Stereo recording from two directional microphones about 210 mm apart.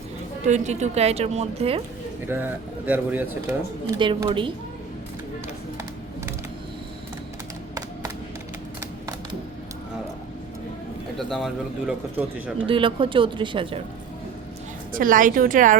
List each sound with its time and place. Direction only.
0.4 s a woman's voice: 35° right (ahead or behind)
2.2 s speech: 10° right (ahead or behind)
3.9 s speech: 20° right (ahead or behind)
11.2 s speech: centre (ahead or behind)
12.6 s speech: 25° right (ahead or behind)
14.9 s a woman's voice: 40° right (ahead or behind)